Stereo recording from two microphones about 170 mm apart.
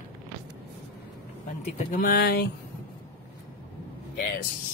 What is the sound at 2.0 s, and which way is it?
Speech, 65° left (ahead or behind).